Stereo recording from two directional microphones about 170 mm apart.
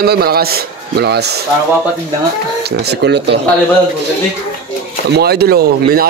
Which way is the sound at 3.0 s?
80° right.